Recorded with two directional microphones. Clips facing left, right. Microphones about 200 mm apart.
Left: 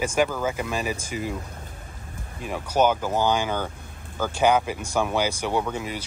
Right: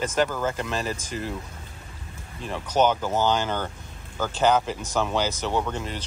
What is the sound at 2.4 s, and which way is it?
Speech, 10° left (ahead or behind).